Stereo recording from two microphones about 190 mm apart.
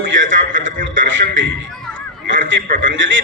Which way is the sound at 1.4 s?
80° right.